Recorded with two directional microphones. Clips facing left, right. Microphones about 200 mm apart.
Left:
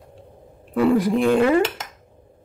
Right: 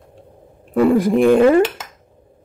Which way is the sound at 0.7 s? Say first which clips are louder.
Right 4 dB; 50° right (ahead or behind).